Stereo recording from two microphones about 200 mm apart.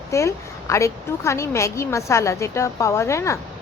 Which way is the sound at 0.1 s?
15° left (ahead or behind).